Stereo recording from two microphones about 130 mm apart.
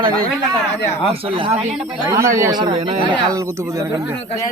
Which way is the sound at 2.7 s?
45° right (ahead or behind).